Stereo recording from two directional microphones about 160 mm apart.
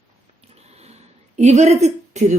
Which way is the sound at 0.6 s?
40° right (ahead or behind).